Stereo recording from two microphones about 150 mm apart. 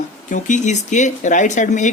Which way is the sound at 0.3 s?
55° left (ahead or behind).